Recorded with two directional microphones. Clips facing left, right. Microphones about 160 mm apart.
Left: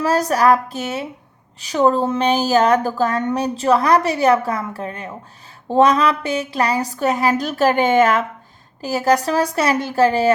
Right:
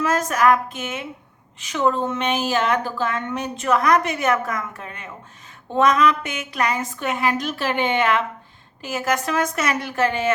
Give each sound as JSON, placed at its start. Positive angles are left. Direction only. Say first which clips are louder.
{"t": 0.0, "sound": "a woman's voice", "louder": "left 3 dB", "side_deg": 35}